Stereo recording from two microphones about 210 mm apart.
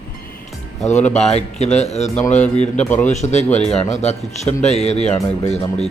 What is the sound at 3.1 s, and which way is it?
Speech, 35° left (ahead or behind).